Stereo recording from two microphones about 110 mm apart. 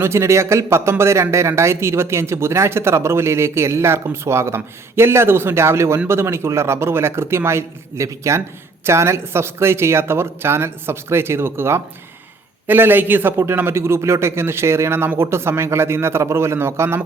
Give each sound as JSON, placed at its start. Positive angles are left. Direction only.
{"t": 0.0, "sound": "a man's voice", "side_deg": -25}